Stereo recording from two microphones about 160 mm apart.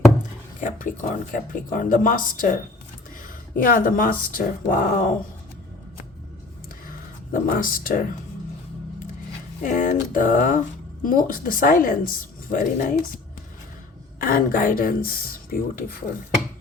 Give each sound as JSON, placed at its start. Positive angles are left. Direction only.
{"t": 0.6, "sound": "speech", "side_deg": 55}
{"t": 7.3, "sound": "speech", "side_deg": 60}
{"t": 9.6, "sound": "speech", "side_deg": 55}
{"t": 14.2, "sound": "speech", "side_deg": 65}